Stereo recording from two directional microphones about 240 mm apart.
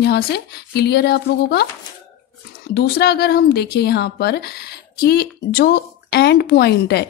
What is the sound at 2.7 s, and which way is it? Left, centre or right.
Speech, left.